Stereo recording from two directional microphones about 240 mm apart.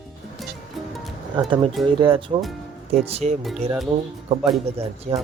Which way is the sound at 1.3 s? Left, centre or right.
Right.